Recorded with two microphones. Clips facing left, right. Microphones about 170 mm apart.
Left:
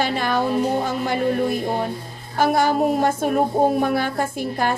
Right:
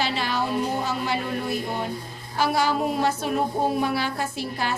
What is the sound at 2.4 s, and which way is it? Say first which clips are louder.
Music: left 5 dB; 50° left (ahead or behind).